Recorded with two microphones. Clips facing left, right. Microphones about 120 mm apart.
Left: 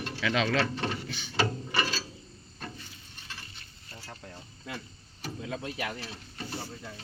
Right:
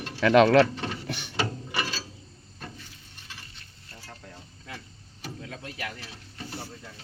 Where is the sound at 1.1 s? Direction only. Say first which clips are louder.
Right 5 dB; 65° right (ahead or behind).